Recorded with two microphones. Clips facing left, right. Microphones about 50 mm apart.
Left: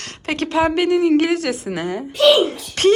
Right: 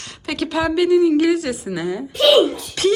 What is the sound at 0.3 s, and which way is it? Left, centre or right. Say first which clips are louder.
A woman's voice: left 2 dB; left.